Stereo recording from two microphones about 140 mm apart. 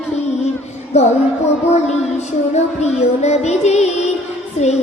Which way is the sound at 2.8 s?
50° left (ahead or behind).